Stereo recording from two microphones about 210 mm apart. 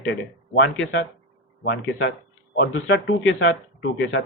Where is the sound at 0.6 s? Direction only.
55° left (ahead or behind).